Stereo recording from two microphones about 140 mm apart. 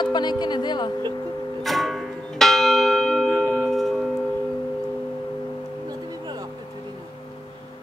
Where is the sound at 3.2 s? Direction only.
20° right (ahead or behind).